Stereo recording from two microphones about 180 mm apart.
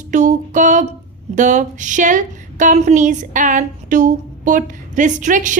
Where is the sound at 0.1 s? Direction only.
45° right (ahead or behind).